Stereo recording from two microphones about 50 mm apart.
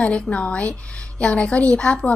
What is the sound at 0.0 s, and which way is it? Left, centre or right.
A woman's voice, left.